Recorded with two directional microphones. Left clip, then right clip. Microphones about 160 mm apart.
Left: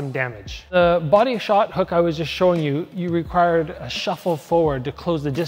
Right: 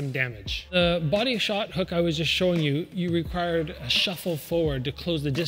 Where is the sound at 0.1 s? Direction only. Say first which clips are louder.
Left 1 dB; 10° right (ahead or behind).